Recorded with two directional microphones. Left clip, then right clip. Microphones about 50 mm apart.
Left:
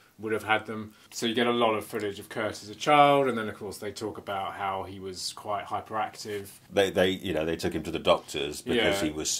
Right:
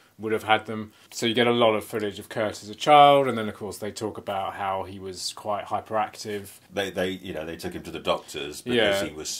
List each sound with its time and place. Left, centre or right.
0.2 s speech: right
6.7 s speech: left
8.7 s speech: right
9.1 s speech: left